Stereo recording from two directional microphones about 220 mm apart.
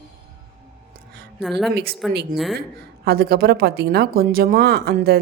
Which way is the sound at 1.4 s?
Centre (ahead or behind).